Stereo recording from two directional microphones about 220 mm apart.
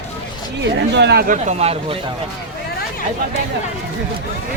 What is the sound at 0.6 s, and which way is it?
Speech, 50° right (ahead or behind).